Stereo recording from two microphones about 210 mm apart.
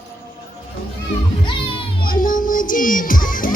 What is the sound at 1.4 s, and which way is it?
Music, 25° left (ahead or behind).